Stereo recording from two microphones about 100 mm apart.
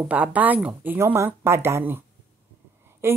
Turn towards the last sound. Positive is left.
turn(degrees=-25)  # may be behind; listen again after turning